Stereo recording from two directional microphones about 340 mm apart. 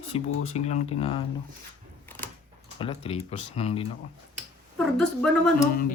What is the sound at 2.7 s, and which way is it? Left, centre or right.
Speech, centre.